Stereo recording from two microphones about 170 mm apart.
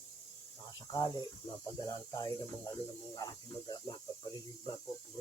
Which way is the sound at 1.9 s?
20° left (ahead or behind).